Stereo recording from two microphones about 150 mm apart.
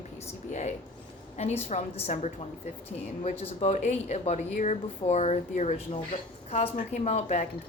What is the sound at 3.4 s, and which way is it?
Speech, 50° left (ahead or behind).